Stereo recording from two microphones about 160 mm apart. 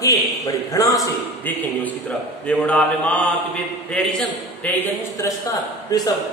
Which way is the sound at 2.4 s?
5° left (ahead or behind).